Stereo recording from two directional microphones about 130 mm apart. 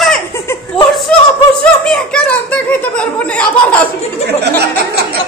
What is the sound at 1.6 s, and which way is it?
Speech, 5° left (ahead or behind).